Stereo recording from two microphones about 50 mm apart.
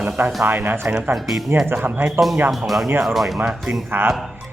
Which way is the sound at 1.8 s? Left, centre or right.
Right.